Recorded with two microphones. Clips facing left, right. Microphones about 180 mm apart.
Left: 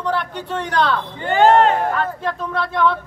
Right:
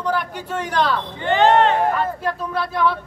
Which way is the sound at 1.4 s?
45° left (ahead or behind).